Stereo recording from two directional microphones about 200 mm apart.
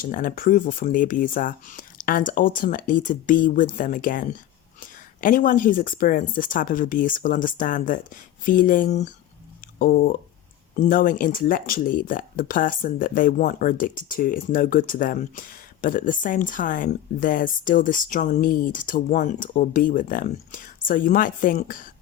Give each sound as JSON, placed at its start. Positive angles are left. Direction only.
{"t": 0.0, "sound": "speech", "side_deg": 45}